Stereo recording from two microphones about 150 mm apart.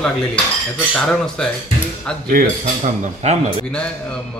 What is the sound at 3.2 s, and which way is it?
Speech, 45° right (ahead or behind).